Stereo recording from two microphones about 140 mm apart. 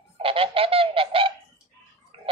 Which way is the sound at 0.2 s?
40° right (ahead or behind).